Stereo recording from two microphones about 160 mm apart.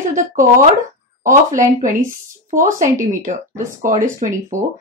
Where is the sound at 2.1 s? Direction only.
55° right (ahead or behind).